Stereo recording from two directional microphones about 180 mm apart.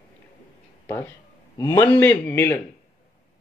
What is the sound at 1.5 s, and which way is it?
Speech, 20° left (ahead or behind).